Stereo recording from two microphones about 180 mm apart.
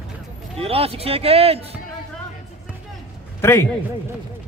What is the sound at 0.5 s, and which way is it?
Speech, 30° right (ahead or behind).